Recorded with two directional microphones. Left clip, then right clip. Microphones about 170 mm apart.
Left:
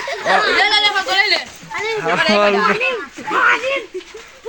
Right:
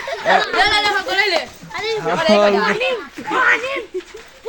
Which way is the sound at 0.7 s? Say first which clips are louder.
Left 2 dB; 45° right (ahead or behind).